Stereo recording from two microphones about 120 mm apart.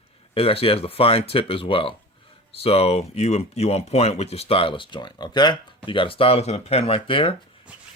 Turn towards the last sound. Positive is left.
turn(degrees=45)  # may be behind; listen again after turning